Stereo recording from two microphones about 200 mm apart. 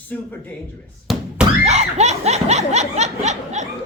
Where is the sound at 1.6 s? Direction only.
35° right (ahead or behind).